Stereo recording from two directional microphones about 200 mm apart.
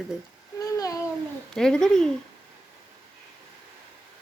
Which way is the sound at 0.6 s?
15° left (ahead or behind).